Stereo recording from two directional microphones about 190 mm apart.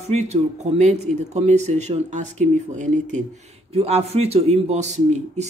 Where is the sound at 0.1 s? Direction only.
35° right (ahead or behind).